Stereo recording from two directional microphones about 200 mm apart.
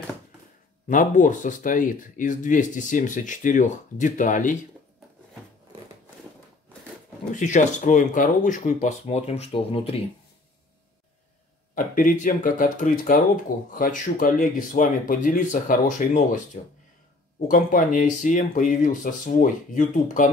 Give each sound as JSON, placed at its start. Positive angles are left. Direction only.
{"t": 0.8, "sound": "speech", "side_deg": 40}
{"t": 7.3, "sound": "speech", "side_deg": 40}
{"t": 11.7, "sound": "speech", "side_deg": 40}
{"t": 17.5, "sound": "speech", "side_deg": 45}